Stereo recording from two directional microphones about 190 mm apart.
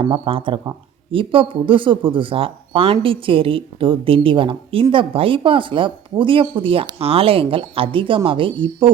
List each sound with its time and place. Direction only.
0.0 s speech: 25° right (ahead or behind)